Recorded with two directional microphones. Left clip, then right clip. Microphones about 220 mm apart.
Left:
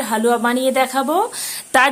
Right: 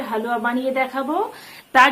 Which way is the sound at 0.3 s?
55° left (ahead or behind).